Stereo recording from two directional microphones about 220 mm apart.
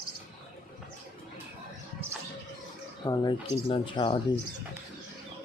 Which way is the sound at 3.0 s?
20° left (ahead or behind).